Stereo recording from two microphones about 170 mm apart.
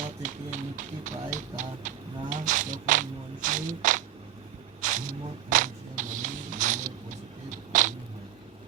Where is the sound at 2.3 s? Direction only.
50° right (ahead or behind).